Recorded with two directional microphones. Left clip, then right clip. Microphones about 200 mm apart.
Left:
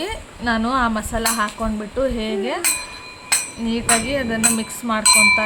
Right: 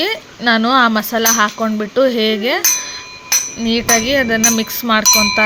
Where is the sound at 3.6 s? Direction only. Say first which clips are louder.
Right 7 dB; 30° right (ahead or behind).